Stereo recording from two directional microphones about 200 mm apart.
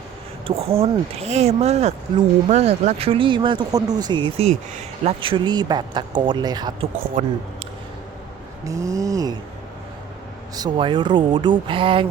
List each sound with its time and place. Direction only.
0.4 s speech: 30° right (ahead or behind)
7.2 s speech: 40° right (ahead or behind)
8.6 s ratchet: 15° right (ahead or behind)
10.5 s speech: 20° right (ahead or behind)